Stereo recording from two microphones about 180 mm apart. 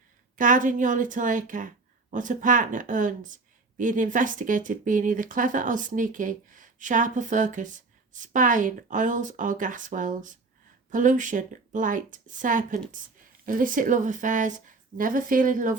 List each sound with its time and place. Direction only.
0.3 s a woman's voice: 45° right (ahead or behind)